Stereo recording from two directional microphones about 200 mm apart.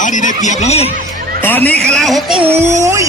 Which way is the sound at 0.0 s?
40° left (ahead or behind).